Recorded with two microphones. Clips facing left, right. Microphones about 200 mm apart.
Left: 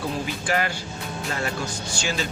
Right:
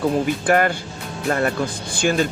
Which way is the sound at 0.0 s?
55° right (ahead or behind).